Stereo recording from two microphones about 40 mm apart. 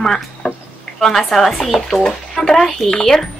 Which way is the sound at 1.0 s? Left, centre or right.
Centre.